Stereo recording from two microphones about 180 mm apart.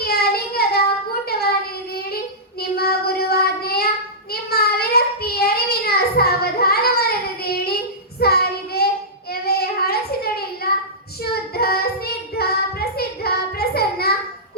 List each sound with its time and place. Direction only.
0.0 s child singing: 60° left (ahead or behind)
2.6 s child singing: 60° left (ahead or behind)